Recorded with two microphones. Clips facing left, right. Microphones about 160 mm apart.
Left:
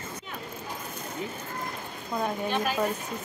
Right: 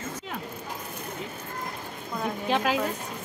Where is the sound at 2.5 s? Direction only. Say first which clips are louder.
Right 4 dB; 90° right.